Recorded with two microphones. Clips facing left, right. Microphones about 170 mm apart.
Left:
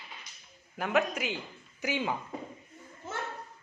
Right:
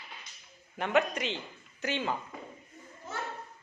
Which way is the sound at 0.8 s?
Centre (ahead or behind).